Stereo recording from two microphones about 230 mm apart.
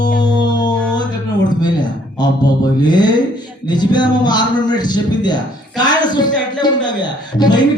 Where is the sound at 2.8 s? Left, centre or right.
Centre.